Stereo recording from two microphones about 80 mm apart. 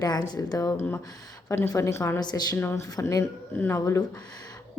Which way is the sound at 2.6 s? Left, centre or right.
Left.